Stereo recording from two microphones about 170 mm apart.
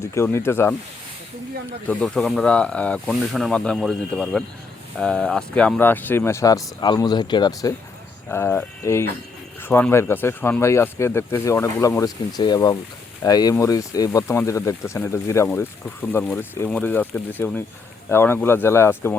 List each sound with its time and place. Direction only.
0.0 s speech: 15° left (ahead or behind)
1.9 s speech: 5° left (ahead or behind); by 7.7 s 25° left (ahead or behind)
8.3 s speech: 15° left (ahead or behind)